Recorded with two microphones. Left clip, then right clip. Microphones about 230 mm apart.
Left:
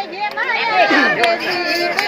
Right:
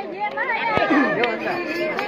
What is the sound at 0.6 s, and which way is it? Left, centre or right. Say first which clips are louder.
Chatter: left 6 dB; left.